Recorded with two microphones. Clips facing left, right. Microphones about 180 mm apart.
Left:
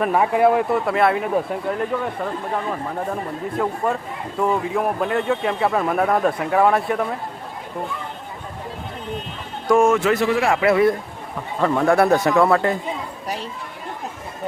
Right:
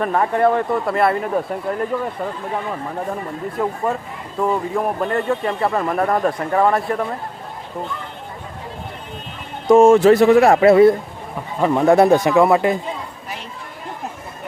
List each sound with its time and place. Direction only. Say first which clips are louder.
0.0 s speech: even; 5° left (ahead or behind)
3.6 s speech: right 1 dB; centre (ahead or behind)
9.6 s speech: right 6 dB; 25° right (ahead or behind)
11.6 s a man's voice: right 3 dB; 15° right (ahead or behind)